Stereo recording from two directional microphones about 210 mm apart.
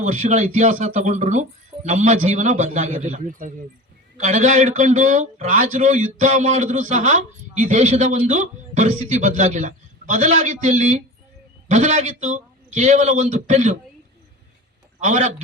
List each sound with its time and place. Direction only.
0.0 s a man's voice: 35° right (ahead or behind)
15.0 s a man's voice: 35° right (ahead or behind)